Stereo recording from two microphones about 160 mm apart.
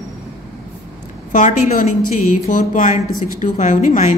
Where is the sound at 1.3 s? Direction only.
50° left (ahead or behind).